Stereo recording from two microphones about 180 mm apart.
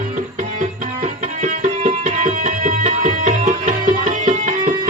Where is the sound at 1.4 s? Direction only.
40° right (ahead or behind).